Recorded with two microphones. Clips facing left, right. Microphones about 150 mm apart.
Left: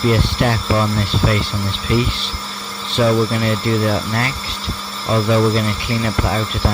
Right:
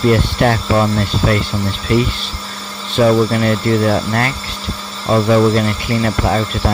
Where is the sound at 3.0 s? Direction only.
55° right (ahead or behind).